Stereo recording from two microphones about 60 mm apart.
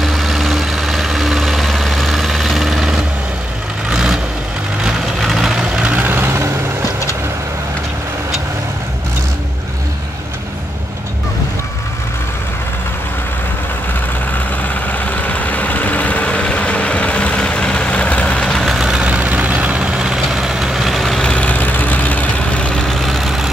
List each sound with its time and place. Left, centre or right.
0.0 s vehicle: centre
5.6 s vehicle: centre
5.9 s vehicle: right
14.9 s vehicle: left
18.6 s vehicle: centre
18.9 s vehicle: right
19.8 s vehicle: centre
21.2 s vehicle: centre
21.5 s vehicle: left; by 23.5 s centre